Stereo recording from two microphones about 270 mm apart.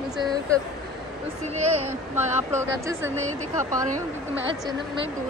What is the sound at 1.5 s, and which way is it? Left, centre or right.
Speech, right.